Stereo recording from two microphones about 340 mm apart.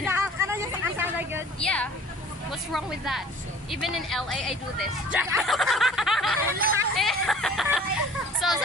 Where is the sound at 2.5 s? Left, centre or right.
Centre.